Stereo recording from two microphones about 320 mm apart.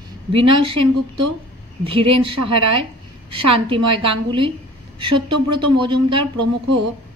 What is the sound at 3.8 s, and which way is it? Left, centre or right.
A woman's voice, centre.